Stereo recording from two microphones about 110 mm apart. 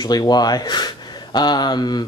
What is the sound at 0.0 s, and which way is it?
Speech, 40° left (ahead or behind).